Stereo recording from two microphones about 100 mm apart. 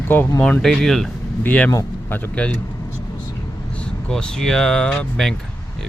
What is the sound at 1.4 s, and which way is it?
Speech, 15° left (ahead or behind).